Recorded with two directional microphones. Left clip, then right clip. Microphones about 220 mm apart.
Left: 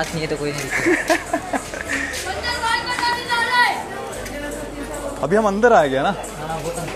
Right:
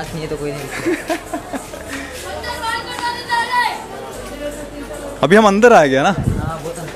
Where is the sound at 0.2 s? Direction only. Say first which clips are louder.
Even; 10° right (ahead or behind).